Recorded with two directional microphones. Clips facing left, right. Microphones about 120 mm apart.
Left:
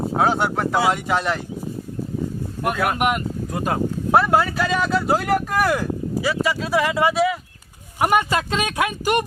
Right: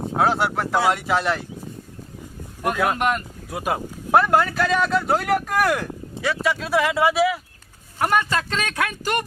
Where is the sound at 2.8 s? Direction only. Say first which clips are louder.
Even; 10° left (ahead or behind).